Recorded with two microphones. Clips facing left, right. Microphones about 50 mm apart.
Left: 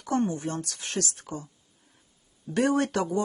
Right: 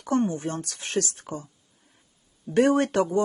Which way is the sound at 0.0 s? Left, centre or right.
Right.